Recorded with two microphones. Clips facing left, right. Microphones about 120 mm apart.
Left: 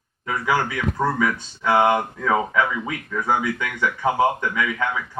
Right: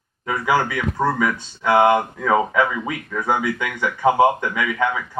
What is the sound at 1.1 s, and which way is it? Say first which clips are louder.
Speech: right 1 dB; 10° right (ahead or behind).